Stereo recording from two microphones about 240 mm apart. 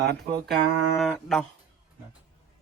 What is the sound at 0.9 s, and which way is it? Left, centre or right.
Speech, centre.